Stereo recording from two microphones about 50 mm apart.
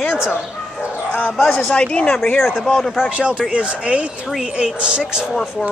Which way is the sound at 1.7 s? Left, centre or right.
Left.